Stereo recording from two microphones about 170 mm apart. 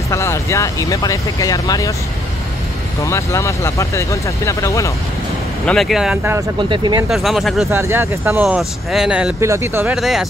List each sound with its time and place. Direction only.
0.1 s speech: 15° left (ahead or behind)
3.0 s speech: 15° left (ahead or behind)
5.7 s speech: centre (ahead or behind)
6.7 s speech: 30° right (ahead or behind)
7.1 s speech: centre (ahead or behind)
7.7 s speech: 15° right (ahead or behind)
9.9 s speech: centre (ahead or behind)